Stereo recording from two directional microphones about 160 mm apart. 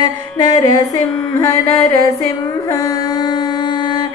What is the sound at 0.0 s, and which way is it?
Music, 25° left (ahead or behind).